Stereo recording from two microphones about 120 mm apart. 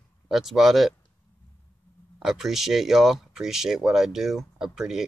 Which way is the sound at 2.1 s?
5° right (ahead or behind).